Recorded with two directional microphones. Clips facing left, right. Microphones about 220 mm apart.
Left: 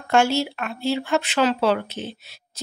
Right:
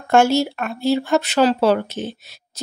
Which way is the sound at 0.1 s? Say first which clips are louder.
Right 4 dB; 45° right (ahead or behind).